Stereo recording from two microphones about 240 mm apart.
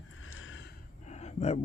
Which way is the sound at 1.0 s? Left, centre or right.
Left.